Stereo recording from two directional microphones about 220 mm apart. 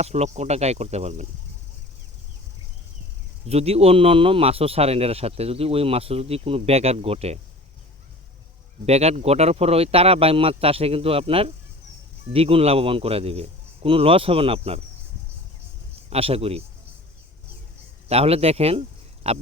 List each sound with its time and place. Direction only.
0.0 s speech: 30° right (ahead or behind)
3.4 s speech: 30° right (ahead or behind)
8.9 s speech: 30° right (ahead or behind)
16.0 s speech: 25° right (ahead or behind)
18.1 s speech: 25° right (ahead or behind)